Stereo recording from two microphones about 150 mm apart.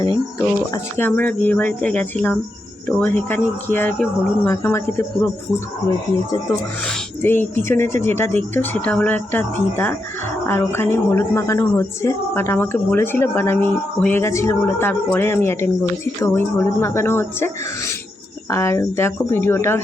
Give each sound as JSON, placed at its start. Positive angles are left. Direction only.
{"t": 0.7, "sound": "a woman's voice", "side_deg": 15}
{"t": 6.8, "sound": "a woman's voice", "side_deg": 10}